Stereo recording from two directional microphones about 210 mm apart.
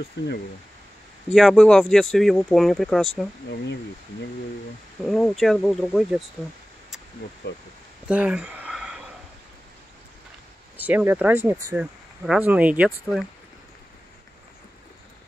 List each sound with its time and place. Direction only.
0.2 s speech: 55° left (ahead or behind)
1.3 s speech: centre (ahead or behind)
5.0 s speech: centre (ahead or behind)
8.1 s a sound: 5° right (ahead or behind)
10.8 s speech: 5° right (ahead or behind)